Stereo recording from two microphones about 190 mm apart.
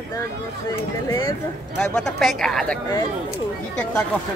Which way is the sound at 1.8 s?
5° left (ahead or behind).